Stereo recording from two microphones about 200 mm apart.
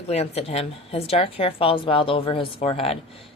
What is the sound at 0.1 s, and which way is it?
A woman's voice, 30° left (ahead or behind).